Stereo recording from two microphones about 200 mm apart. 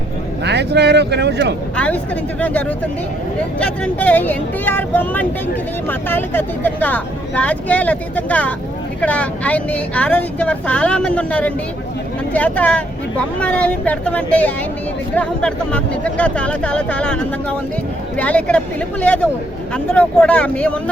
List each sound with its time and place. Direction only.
0.4 s speech: 55° right (ahead or behind)
1.7 s speech: 5° left (ahead or behind)